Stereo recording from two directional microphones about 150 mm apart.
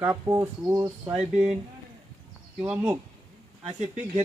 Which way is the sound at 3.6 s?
40° right (ahead or behind).